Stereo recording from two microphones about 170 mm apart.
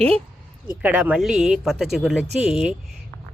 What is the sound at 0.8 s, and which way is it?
Speech, 10° right (ahead or behind).